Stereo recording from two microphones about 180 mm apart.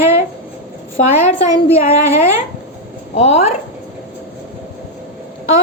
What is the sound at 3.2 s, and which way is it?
Speech, 35° left (ahead or behind).